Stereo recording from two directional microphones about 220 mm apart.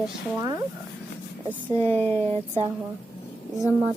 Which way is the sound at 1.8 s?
10° left (ahead or behind).